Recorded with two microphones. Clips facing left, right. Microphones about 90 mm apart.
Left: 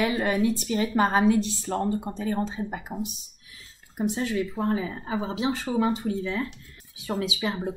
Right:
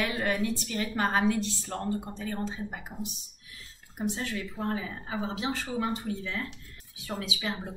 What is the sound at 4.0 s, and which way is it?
A woman's voice, 15° left (ahead or behind).